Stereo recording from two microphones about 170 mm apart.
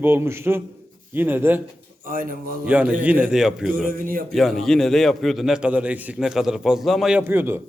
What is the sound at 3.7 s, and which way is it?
Speech, 55° right (ahead or behind).